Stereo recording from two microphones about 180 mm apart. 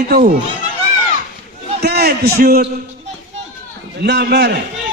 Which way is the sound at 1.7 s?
60° right (ahead or behind).